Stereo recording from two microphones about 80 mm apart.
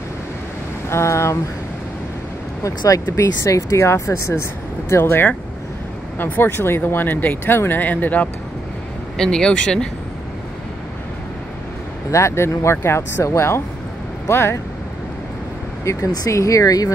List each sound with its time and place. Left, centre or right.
0.8 s speech: left
2.8 s speech: left
9.1 s speech: centre
12.1 s speech: left
15.8 s speech: left